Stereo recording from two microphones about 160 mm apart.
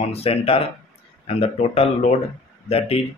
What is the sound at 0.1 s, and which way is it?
Speech, 35° left (ahead or behind).